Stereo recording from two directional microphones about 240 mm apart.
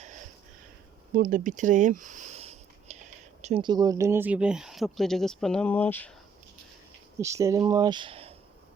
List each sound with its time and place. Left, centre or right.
1.1 s speech: right; by 6.1 s centre
7.2 s speech: centre